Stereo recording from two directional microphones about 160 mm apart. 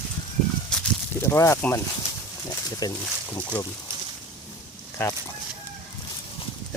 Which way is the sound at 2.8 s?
20° left (ahead or behind).